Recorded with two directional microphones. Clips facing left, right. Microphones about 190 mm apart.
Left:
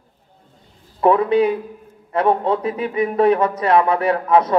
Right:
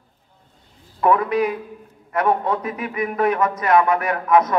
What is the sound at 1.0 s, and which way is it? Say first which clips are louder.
A man's voice: left 4 dB; 30° left (ahead or behind).